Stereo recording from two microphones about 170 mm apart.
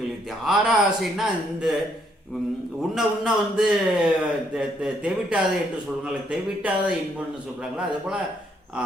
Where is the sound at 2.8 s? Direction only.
5° right (ahead or behind).